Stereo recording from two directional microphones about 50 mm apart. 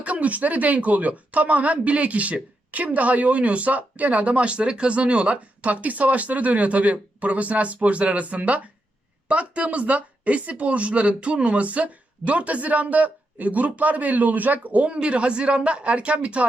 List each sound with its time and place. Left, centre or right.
0.0 s speech: right